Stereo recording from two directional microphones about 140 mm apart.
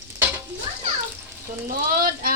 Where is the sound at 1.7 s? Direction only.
90° right.